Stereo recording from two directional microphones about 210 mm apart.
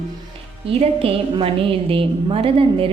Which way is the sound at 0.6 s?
25° right (ahead or behind).